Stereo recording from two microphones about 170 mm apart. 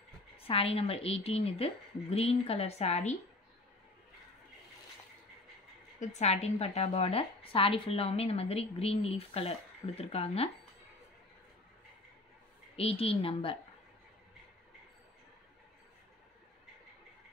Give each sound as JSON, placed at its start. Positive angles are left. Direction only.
{"t": 0.4, "sound": "a woman's voice", "side_deg": 35}
{"t": 5.9, "sound": "a woman's voice", "side_deg": 40}
{"t": 12.7, "sound": "a woman's voice", "side_deg": 35}